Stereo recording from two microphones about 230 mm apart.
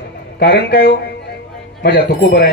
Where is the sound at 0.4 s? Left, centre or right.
Left.